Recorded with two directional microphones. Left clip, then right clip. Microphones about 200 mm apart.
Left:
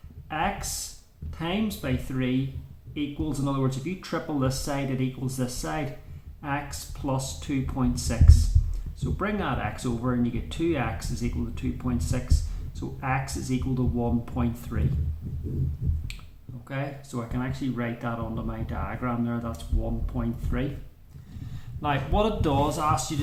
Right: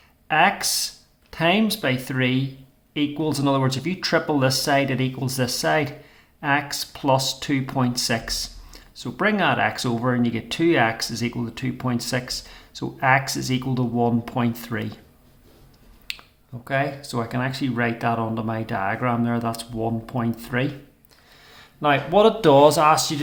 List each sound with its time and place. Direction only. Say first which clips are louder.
0.3 s speech: right 10 dB; 35° right (ahead or behind)
16.6 s speech: right 11 dB; 35° right (ahead or behind)
21.8 s speech: right 9 dB; 20° right (ahead or behind)